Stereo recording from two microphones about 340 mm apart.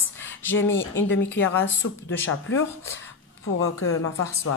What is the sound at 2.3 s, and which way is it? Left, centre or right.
Speech, left.